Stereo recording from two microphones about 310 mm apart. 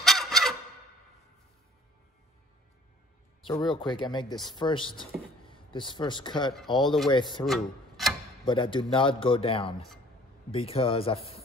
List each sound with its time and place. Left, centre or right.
0.0 s fowl: centre
3.4 s speech: centre
3.8 s a man's voice: centre
7.4 s a sound: centre
8.5 s a man's voice: centre